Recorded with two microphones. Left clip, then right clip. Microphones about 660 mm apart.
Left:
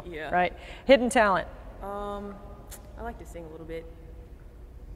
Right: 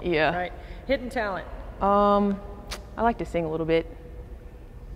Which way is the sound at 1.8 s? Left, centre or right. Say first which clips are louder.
Right 15 dB; right.